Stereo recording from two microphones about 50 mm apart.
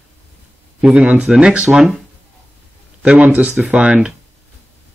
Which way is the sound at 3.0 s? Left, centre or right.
Right.